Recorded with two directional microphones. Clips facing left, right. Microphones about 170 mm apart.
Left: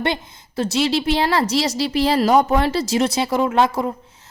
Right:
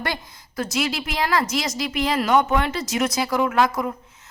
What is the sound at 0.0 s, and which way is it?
A woman's voice, 25° left (ahead or behind).